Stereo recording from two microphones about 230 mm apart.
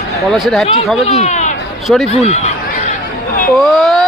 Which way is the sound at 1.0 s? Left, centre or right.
Left.